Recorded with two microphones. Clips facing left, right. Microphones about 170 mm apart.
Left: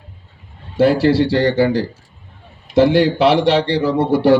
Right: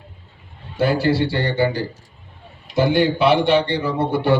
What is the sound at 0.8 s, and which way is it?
Speech, 90° left.